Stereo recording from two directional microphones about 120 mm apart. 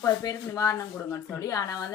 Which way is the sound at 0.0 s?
30° left (ahead or behind).